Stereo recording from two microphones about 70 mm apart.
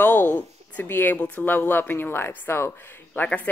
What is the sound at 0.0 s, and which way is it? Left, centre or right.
A woman's voice, left.